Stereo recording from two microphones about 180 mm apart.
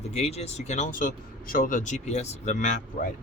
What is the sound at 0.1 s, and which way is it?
Speech, 35° left (ahead or behind).